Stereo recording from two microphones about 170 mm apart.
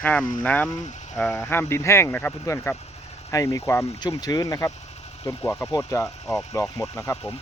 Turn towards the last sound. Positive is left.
turn(degrees=10)  # may be behind; listen again after turning